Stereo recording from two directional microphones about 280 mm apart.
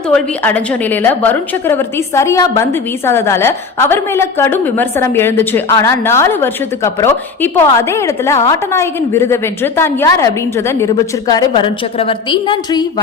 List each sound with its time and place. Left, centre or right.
0.1 s a woman's voice: centre